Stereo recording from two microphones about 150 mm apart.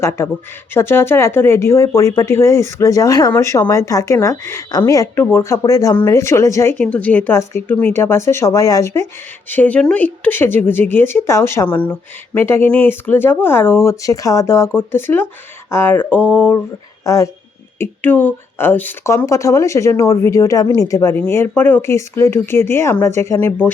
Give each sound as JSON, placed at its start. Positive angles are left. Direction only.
{"t": 0.2, "sound": "speech", "side_deg": 15}